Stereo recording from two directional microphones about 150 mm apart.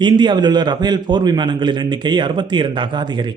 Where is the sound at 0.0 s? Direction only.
30° right (ahead or behind).